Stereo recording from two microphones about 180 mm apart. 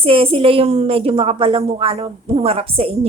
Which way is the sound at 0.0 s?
30° right (ahead or behind).